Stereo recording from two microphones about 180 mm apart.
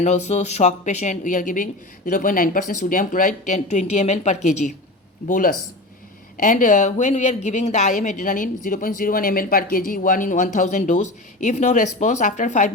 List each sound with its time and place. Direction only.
0.0 s a woman's voice: 40° left (ahead or behind)
6.3 s a woman's voice: 45° left (ahead or behind)